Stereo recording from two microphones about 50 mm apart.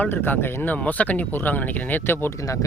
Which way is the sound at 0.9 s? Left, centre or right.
Left.